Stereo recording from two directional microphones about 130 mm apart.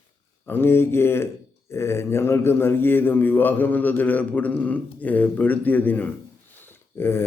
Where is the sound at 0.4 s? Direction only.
15° left (ahead or behind).